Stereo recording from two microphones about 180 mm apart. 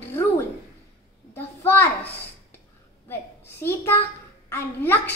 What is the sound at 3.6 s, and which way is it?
A woman's voice, 10° left (ahead or behind).